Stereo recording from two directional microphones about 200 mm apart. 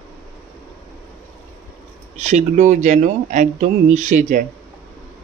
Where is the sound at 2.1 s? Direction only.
35° right (ahead or behind).